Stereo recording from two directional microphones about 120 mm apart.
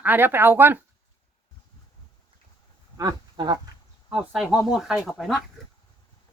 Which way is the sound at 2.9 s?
35° right (ahead or behind).